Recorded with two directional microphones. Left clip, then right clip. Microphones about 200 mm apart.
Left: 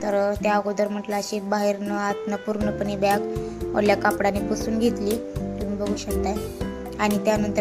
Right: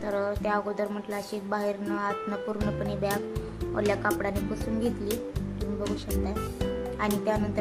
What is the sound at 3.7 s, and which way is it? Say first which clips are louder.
Speech: left 7 dB; 20° left (ahead or behind).